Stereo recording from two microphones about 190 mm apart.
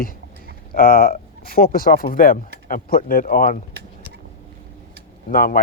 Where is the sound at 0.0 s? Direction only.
50° left (ahead or behind).